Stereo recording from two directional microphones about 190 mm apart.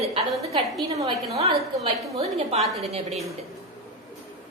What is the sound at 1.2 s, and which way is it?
A woman's voice, 35° right (ahead or behind).